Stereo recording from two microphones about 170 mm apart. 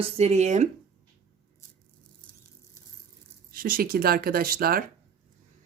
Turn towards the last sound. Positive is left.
turn(degrees=-60)  # may be behind; listen again after turning